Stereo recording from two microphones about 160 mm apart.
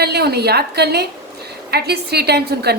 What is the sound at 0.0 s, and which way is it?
A woman's voice, 85° right.